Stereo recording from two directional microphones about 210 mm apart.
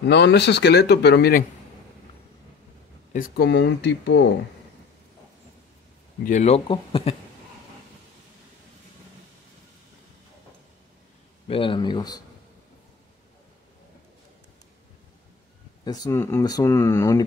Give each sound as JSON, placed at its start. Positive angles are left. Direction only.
{"t": 0.0, "sound": "speech", "side_deg": 55}
{"t": 3.1, "sound": "speech", "side_deg": 45}
{"t": 6.2, "sound": "speech", "side_deg": 35}
{"t": 11.4, "sound": "speech", "side_deg": 25}
{"t": 15.8, "sound": "speech", "side_deg": 20}